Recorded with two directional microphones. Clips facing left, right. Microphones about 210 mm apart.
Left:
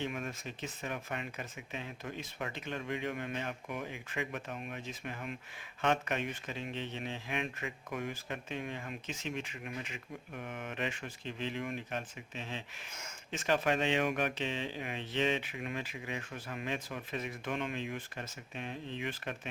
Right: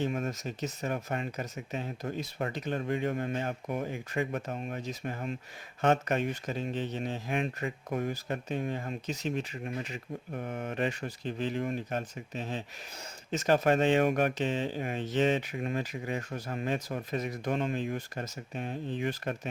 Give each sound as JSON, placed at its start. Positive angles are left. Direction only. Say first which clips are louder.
{"t": 0.0, "sound": "speech", "louder": "right 6 dB", "side_deg": -40}